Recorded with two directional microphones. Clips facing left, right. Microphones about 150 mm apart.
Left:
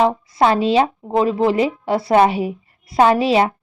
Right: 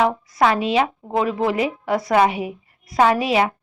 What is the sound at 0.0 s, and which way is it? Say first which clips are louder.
A woman's voice: left 2 dB; 25° left (ahead or behind).